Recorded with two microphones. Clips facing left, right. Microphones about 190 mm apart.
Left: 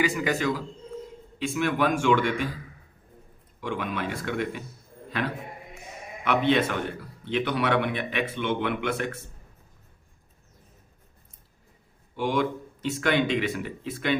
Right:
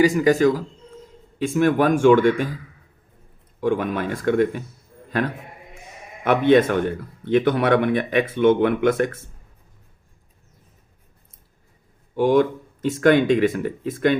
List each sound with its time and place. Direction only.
0.0 s a man's voice: 40° right (ahead or behind)
3.6 s a man's voice: 45° right (ahead or behind)
6.2 s a man's voice: 50° right (ahead or behind)
12.1 s a man's voice: 45° right (ahead or behind)